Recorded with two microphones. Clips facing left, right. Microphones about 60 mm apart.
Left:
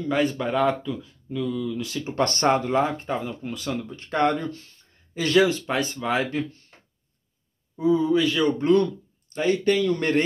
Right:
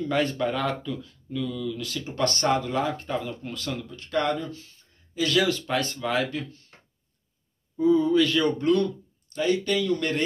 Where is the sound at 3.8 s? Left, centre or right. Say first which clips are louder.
Left 4 dB; left.